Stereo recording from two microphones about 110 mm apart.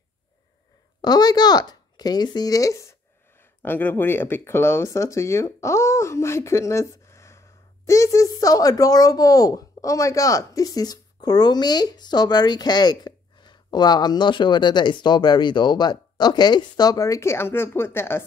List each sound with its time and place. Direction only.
1.0 s speech: 35° left (ahead or behind)
3.6 s speech: 20° left (ahead or behind)